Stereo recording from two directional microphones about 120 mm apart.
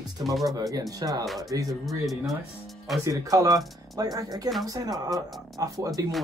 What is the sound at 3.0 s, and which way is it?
Speech, 30° right (ahead or behind).